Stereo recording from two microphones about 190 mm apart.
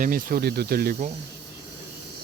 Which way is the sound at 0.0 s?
45° right (ahead or behind).